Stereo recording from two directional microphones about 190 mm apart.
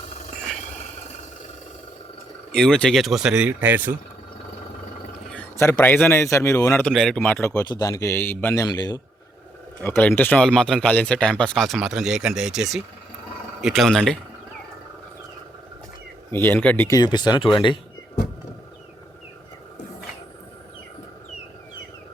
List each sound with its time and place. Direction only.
2.5 s speech: 5° left (ahead or behind)
5.3 s a man's voice: 10° left (ahead or behind)
9.8 s speech: 10° left (ahead or behind)
16.3 s a man's voice: 10° left (ahead or behind)
17.0 s speech: 20° left (ahead or behind)